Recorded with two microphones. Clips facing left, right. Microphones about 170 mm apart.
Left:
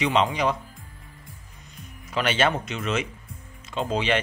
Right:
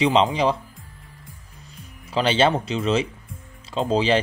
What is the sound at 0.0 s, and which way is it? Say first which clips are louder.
Speech: right 4 dB; 30° right (ahead or behind).